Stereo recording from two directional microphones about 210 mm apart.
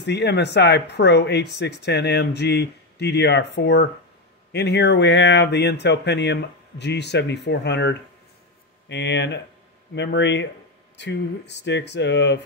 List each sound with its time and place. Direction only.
0.0 s speech: 55° left (ahead or behind)